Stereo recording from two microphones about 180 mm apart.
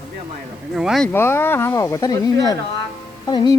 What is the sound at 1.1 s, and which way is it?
Speech, 15° left (ahead or behind).